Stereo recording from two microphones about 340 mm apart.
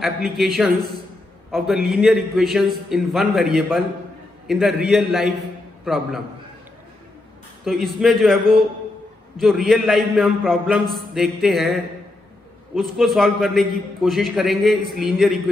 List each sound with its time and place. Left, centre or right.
0.0 s a man's voice: centre
7.6 s a man's voice: centre
12.7 s a man's voice: centre